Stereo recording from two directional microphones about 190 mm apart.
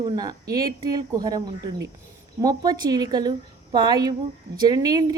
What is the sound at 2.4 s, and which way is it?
A woman's voice, 20° right (ahead or behind).